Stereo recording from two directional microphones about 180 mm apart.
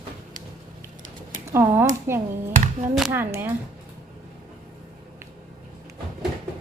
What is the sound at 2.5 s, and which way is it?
Speech, 40° right (ahead or behind).